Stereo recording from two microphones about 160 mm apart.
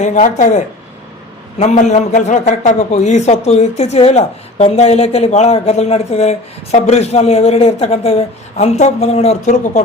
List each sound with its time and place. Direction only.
0.0 s a man's voice: 50° left (ahead or behind)